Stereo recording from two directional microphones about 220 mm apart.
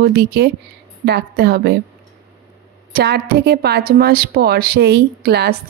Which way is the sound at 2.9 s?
45° right (ahead or behind).